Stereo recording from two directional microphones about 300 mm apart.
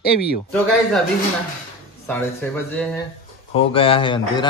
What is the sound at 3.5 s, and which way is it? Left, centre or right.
Speech, centre.